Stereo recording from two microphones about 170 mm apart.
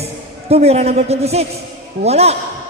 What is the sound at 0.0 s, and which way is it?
A man's voice, 35° right (ahead or behind).